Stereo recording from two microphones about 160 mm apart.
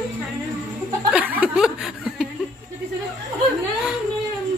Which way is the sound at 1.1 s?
10° right (ahead or behind).